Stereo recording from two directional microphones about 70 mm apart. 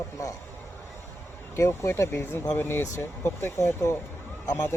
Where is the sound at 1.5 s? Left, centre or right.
Left.